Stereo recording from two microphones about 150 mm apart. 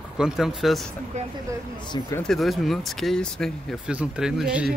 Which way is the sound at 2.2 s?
Centre (ahead or behind).